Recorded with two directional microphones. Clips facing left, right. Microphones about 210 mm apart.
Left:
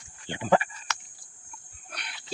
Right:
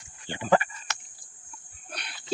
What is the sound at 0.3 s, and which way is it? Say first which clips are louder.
Speech: even; 15° left (ahead or behind).